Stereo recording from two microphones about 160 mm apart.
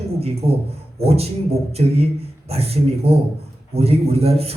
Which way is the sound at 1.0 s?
40° right (ahead or behind).